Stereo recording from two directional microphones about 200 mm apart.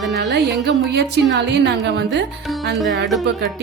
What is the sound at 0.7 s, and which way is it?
A woman's voice, 60° right (ahead or behind).